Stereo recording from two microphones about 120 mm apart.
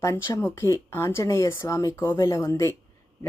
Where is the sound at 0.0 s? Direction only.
25° left (ahead or behind).